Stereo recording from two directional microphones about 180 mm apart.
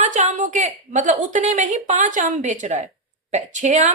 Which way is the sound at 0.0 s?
40° right (ahead or behind).